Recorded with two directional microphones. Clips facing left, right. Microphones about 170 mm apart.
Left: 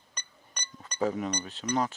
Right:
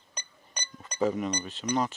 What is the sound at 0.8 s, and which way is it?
Speech, 10° right (ahead or behind).